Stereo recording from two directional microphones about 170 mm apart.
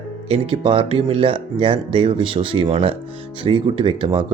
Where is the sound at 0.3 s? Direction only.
30° right (ahead or behind).